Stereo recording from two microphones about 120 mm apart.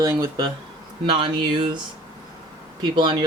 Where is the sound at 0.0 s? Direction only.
30° right (ahead or behind).